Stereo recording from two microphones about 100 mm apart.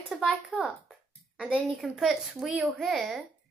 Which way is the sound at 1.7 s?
Centre (ahead or behind).